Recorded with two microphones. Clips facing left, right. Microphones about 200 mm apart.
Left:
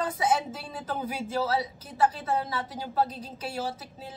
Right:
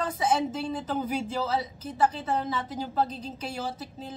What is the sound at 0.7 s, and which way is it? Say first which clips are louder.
A woman's voice: right 4 dB; 10° left (ahead or behind).